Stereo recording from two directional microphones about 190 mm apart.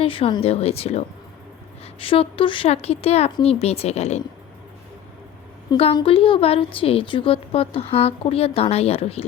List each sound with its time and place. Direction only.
0.0 s speech: 30° left (ahead or behind)
5.7 s speech: 30° left (ahead or behind)